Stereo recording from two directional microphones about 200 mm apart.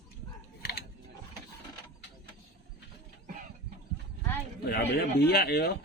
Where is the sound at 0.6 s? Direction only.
55° left (ahead or behind).